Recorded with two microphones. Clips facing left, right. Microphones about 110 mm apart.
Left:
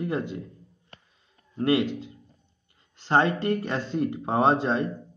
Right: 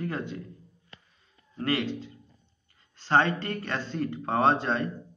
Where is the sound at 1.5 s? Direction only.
20° left (ahead or behind).